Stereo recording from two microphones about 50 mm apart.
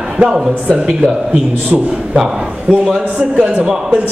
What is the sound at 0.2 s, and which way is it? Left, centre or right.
A man's voice, centre.